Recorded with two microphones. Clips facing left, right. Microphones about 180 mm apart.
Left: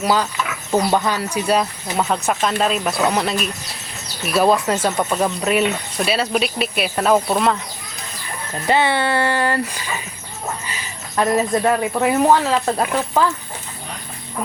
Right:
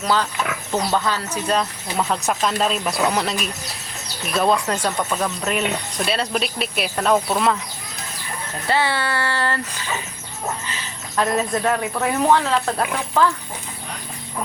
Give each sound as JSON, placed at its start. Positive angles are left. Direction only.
{"t": 0.0, "sound": "speech", "side_deg": 10}
{"t": 8.6, "sound": "speech", "side_deg": 20}